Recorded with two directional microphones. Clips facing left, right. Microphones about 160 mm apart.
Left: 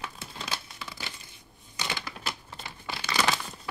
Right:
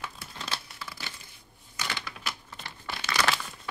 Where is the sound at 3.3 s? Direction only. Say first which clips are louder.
Left 1 dB; 15° left (ahead or behind).